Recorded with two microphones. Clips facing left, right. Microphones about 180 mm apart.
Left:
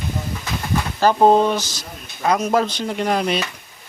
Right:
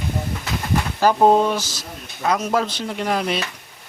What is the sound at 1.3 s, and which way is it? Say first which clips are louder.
Speech: left 1 dB; 5° right (ahead or behind).